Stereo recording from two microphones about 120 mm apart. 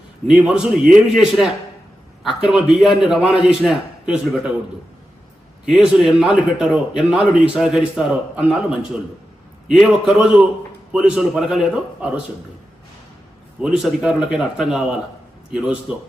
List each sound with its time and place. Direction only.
0.3 s a man's voice: 10° right (ahead or behind)
5.6 s a man's voice: 10° right (ahead or behind)
9.6 s a man's voice: 5° right (ahead or behind)
13.6 s a man's voice: 10° right (ahead or behind)